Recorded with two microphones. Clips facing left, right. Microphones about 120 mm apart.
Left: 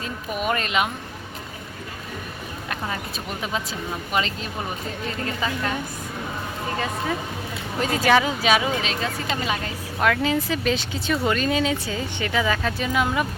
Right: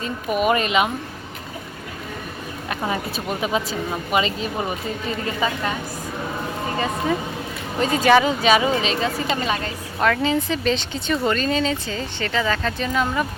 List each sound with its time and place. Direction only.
0.0 s speech: 5° right (ahead or behind)
3.4 s a woman's voice: 5° right (ahead or behind)
7.8 s speech: centre (ahead or behind)